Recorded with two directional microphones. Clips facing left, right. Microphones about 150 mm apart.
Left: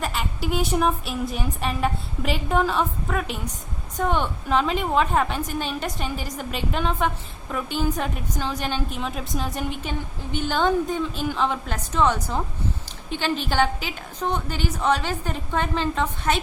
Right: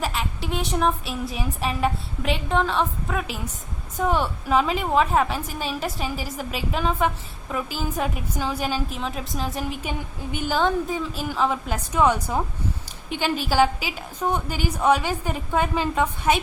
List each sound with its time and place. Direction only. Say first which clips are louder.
0.0 s a woman's voice: even; centre (ahead or behind)